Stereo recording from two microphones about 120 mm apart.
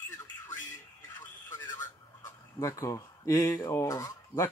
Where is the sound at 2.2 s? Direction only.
25° left (ahead or behind).